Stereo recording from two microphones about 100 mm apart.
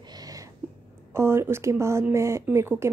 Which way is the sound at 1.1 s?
25° right (ahead or behind).